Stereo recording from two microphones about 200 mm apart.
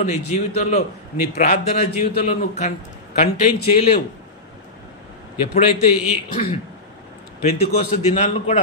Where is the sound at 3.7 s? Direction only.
30° left (ahead or behind).